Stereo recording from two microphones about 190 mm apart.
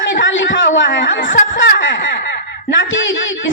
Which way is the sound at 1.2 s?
45° left (ahead or behind).